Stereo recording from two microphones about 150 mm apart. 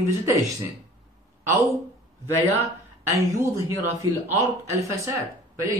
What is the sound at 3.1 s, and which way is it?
Speech, 20° right (ahead or behind).